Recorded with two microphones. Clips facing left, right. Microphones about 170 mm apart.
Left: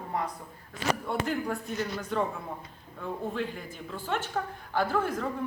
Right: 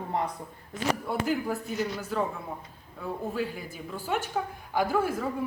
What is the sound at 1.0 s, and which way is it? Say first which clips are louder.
A woman's voice: right 2 dB; 5° right (ahead or behind).